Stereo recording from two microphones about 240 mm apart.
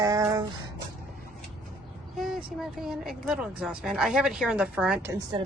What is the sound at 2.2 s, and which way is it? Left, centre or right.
Speech, centre.